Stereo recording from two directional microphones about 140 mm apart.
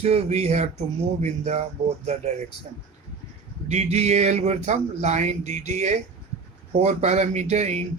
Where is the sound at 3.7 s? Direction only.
50° right (ahead or behind).